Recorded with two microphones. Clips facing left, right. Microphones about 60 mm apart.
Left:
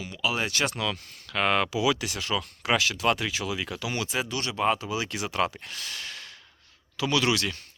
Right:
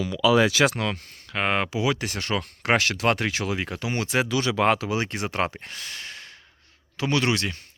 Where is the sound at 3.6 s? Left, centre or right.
Right.